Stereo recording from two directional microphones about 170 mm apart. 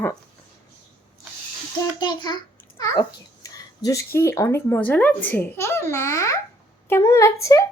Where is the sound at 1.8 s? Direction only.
25° left (ahead or behind).